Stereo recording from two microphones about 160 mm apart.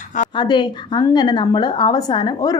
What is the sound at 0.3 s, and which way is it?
A woman's voice, 30° left (ahead or behind).